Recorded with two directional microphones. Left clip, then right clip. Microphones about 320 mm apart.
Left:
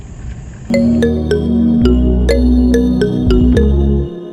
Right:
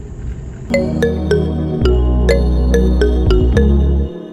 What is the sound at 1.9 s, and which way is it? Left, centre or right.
Music, centre.